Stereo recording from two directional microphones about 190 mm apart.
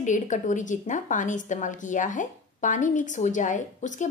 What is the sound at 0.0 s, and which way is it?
A woman's voice, 40° left (ahead or behind).